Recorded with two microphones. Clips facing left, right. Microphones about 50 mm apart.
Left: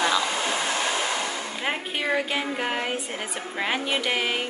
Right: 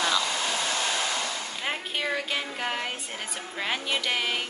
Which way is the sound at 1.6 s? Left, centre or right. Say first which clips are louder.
Left 3 dB; centre.